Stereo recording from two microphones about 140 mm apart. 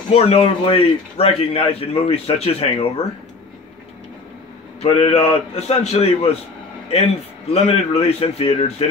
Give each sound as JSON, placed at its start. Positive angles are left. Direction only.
{"t": 0.1, "sound": "a man's voice", "side_deg": 50}
{"t": 4.8, "sound": "a man's voice", "side_deg": 45}
{"t": 7.5, "sound": "a man's voice", "side_deg": 50}